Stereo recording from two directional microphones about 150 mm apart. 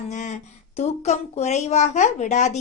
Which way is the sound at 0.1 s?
55° left (ahead or behind).